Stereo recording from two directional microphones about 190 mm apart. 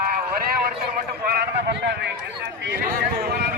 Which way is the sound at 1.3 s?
65° right (ahead or behind).